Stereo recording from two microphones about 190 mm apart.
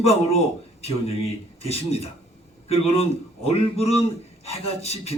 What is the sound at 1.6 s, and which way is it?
Speech, 30° left (ahead or behind).